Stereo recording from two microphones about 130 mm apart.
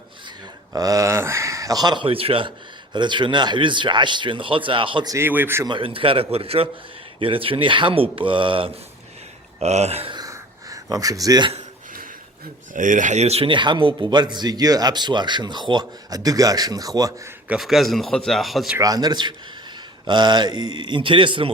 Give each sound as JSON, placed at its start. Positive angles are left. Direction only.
{"t": 0.7, "sound": "speech", "side_deg": -25}
{"t": 5.0, "sound": "speech", "side_deg": -20}
{"t": 5.6, "sound": "a man's voice", "side_deg": -40}
{"t": 9.6, "sound": "speech", "side_deg": -55}
{"t": 10.2, "sound": "a sound", "side_deg": -25}
{"t": 12.7, "sound": "speech", "side_deg": -85}
{"t": 13.5, "sound": "speech", "side_deg": -40}
{"t": 17.5, "sound": "speech", "side_deg": 0}
{"t": 18.8, "sound": "speech", "side_deg": -30}